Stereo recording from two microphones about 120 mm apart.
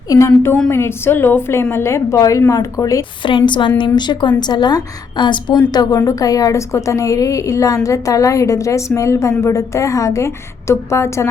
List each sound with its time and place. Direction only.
0.1 s a woman's voice: 20° left (ahead or behind)
3.2 s a woman's voice: 40° left (ahead or behind); by 11.3 s 25° left (ahead or behind)